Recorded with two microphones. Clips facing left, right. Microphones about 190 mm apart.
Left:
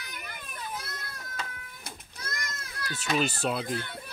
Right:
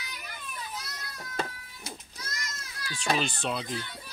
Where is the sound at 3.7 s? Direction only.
55° left (ahead or behind).